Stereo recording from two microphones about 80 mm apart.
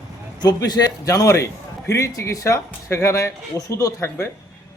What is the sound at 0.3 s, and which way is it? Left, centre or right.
A man's voice, left.